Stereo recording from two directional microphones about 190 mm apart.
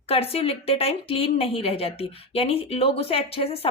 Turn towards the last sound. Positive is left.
turn(degrees=30)  # may be behind; listen again after turning